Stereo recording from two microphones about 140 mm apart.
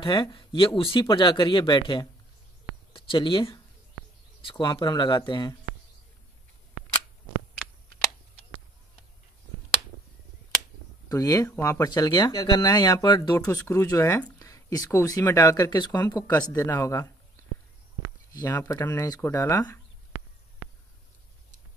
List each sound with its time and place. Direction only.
0.0 s speech: 35° left (ahead or behind)
2.9 s a sound: 35° left (ahead or behind)
4.4 s speech: 35° left (ahead or behind)
11.1 s speech: 25° left (ahead or behind)
18.3 s speech: 20° left (ahead or behind)